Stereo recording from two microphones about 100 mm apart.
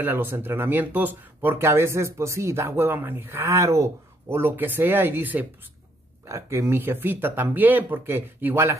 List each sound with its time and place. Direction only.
0.0 s speech: 20° right (ahead or behind)
6.2 s speech: 30° right (ahead or behind)